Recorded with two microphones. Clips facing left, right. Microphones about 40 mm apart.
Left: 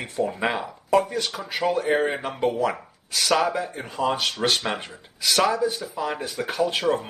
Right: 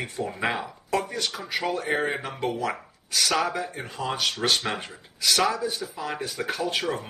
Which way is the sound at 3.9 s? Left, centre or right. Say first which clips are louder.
Left 4 dB; left.